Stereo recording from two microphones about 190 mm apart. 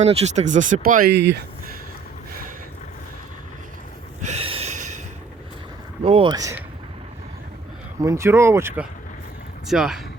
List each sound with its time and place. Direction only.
0.0 s speech: 35° right (ahead or behind)
1.1 s speech: 65° right (ahead or behind)
4.2 s a sound: 35° right (ahead or behind)
6.1 s speech: 25° right (ahead or behind)
8.0 s speech: 15° right (ahead or behind)